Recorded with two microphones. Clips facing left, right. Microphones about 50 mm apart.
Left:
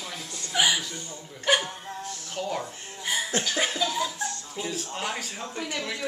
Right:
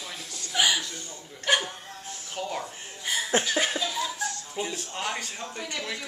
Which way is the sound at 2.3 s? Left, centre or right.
Centre.